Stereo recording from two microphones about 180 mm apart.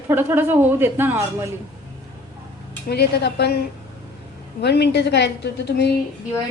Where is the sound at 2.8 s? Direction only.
65° left (ahead or behind).